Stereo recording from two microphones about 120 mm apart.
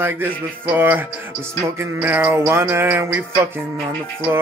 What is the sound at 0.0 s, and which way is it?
Speech, 20° right (ahead or behind).